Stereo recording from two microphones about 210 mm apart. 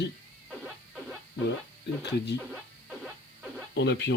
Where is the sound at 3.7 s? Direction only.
55° left (ahead or behind).